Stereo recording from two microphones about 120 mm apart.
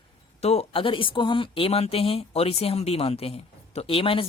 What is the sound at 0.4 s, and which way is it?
Speech, 60° left (ahead or behind).